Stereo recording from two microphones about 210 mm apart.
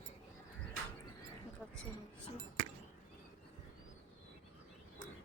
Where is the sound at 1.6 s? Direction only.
5° left (ahead or behind).